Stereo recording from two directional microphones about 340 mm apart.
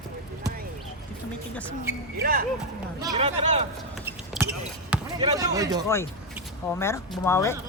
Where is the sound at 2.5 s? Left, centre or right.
Centre.